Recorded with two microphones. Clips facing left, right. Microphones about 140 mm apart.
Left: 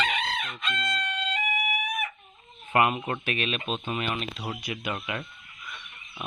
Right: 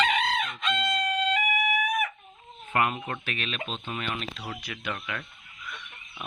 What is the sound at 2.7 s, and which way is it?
Speech, 15° left (ahead or behind).